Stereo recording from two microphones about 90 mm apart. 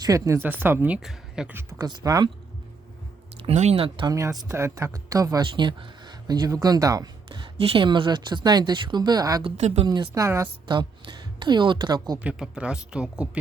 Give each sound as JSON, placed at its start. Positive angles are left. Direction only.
{"t": 0.0, "sound": "speech", "side_deg": -35}
{"t": 0.4, "sound": "speech", "side_deg": -20}
{"t": 0.9, "sound": "speech", "side_deg": -5}
{"t": 1.8, "sound": "speech", "side_deg": -50}
{"t": 3.4, "sound": "speech", "side_deg": -85}
{"t": 4.1, "sound": "speech", "side_deg": -40}
{"t": 5.4, "sound": "speech", "side_deg": -60}
{"t": 7.3, "sound": "speech", "side_deg": -65}
{"t": 9.4, "sound": "speech", "side_deg": -60}
{"t": 10.2, "sound": "speech", "side_deg": -30}
{"t": 10.7, "sound": "speech", "side_deg": -60}
{"t": 12.2, "sound": "speech", "side_deg": -10}